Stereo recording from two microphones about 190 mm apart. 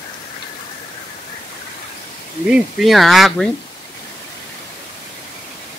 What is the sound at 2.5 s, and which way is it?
Speech, centre (ahead or behind).